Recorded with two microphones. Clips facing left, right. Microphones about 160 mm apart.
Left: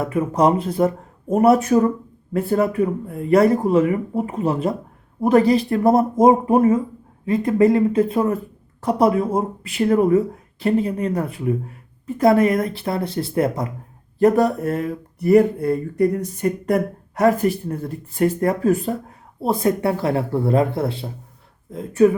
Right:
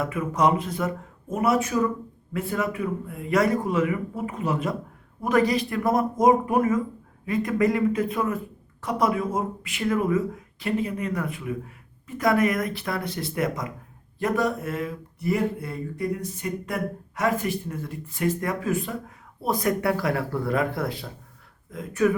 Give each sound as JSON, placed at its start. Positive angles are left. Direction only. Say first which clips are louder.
{"t": 0.0, "sound": "speech", "louder": "left 5 dB", "side_deg": 35}